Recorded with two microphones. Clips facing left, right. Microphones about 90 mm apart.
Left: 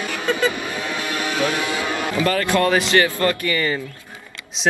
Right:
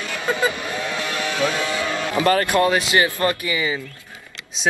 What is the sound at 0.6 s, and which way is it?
Music, 15° left (ahead or behind).